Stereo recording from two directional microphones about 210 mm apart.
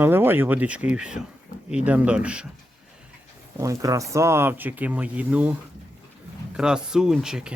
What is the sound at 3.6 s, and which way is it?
Speech, 15° right (ahead or behind).